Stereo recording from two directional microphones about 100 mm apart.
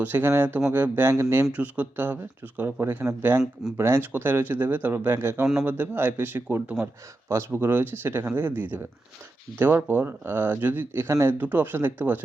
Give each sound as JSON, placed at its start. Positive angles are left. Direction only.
{"t": 0.0, "sound": "speech", "side_deg": -20}
{"t": 1.5, "sound": "speech", "side_deg": -15}